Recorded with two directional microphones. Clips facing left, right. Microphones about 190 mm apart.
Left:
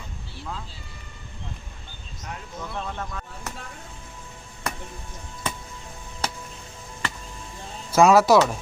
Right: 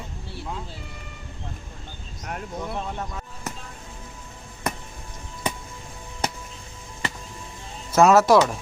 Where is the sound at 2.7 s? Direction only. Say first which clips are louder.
Right 1 dB; 15° right (ahead or behind).